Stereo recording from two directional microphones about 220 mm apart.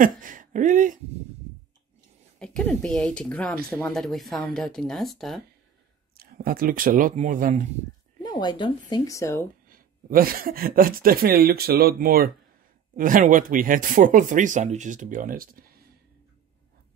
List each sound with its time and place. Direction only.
0.0 s speech: 35° right (ahead or behind)
2.3 s speech: 5° left (ahead or behind)
6.1 s speech: 40° right (ahead or behind)
8.2 s speech: 20° left (ahead or behind)
9.7 s speech: 40° right (ahead or behind)